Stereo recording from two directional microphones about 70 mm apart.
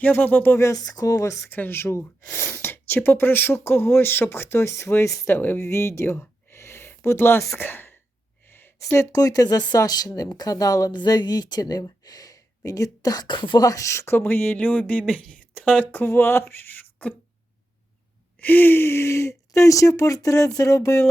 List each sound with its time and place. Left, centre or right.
0.0 s speech: left
0.5 s speech: left
0.8 s speech: left
1.5 s speech: left
5.0 s speech: left
5.3 s speech: left
9.1 s speech: left
14.2 s speech: left
16.1 s speech: left
18.3 s speech: left
19.5 s speech: left